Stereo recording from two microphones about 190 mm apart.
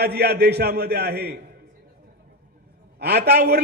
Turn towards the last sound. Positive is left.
turn(degrees=-60)  # may be behind; listen again after turning